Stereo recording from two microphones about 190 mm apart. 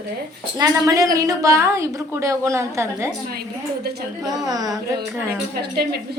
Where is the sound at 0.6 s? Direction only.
20° right (ahead or behind).